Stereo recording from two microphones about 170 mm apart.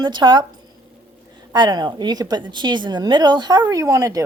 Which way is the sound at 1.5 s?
25° right (ahead or behind).